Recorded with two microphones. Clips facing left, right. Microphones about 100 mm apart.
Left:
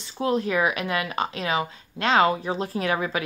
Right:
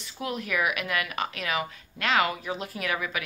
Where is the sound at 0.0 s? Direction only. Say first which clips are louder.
Left 9 dB; 30° left (ahead or behind).